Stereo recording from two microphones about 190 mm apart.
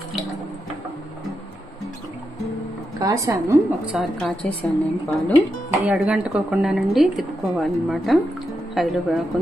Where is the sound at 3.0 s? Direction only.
15° right (ahead or behind).